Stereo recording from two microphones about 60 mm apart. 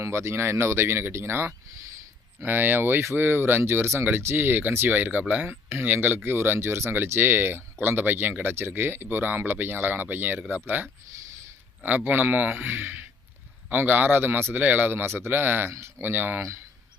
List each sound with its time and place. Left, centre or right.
0.0 s speech: right